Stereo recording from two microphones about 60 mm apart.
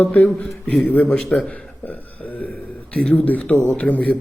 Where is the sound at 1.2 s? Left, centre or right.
Centre.